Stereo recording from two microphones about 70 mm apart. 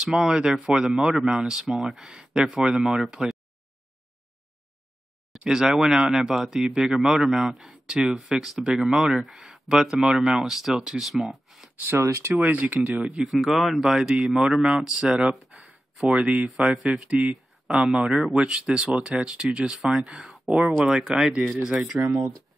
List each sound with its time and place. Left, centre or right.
0.0 s speech: centre
5.5 s speech: centre
12.0 s speech: right
12.4 s speech: right
13.2 s speech: centre